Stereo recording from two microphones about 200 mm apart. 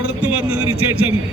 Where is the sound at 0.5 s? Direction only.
90° right.